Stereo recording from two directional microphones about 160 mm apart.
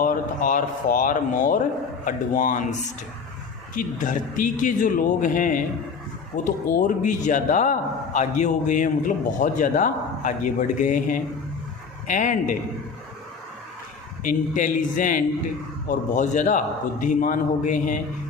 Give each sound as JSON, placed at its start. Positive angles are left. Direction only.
{"t": 0.0, "sound": "speech", "side_deg": 60}
{"t": 3.8, "sound": "a man's voice", "side_deg": 55}
{"t": 14.3, "sound": "a man's voice", "side_deg": 55}